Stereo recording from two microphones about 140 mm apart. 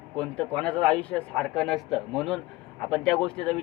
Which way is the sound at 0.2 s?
5° left (ahead or behind).